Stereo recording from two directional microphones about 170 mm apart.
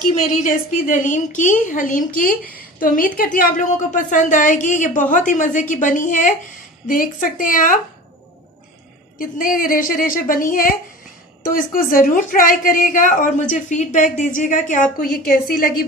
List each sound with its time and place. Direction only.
0.0 s a woman's voice: 50° left (ahead or behind)
9.2 s a woman's voice: 55° left (ahead or behind)